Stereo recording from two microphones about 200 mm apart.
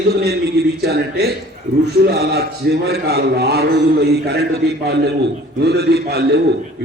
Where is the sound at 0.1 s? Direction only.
55° right (ahead or behind).